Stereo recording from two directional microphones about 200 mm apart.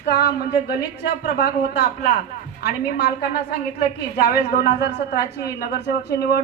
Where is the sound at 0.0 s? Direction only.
55° left (ahead or behind).